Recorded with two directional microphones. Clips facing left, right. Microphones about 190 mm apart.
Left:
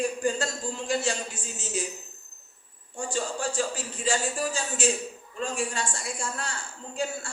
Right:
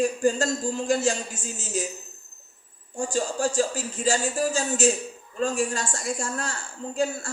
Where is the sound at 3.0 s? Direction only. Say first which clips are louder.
Right 5 dB; 40° right (ahead or behind).